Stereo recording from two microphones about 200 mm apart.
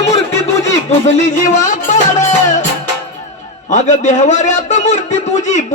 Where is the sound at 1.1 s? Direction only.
35° left (ahead or behind).